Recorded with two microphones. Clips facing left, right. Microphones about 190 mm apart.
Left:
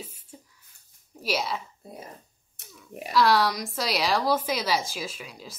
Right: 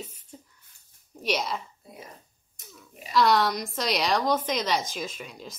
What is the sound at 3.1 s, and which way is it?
A woman's voice, centre (ahead or behind).